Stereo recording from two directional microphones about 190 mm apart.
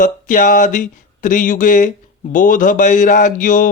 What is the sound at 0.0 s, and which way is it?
Speech, 45° left (ahead or behind).